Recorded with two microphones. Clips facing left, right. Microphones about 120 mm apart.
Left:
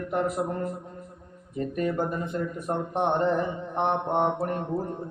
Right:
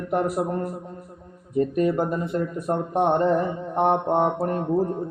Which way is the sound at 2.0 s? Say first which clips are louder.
Right 4 dB; 35° right (ahead or behind).